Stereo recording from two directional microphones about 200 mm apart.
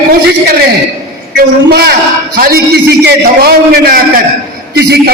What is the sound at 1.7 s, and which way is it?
A man's voice, 50° right (ahead or behind).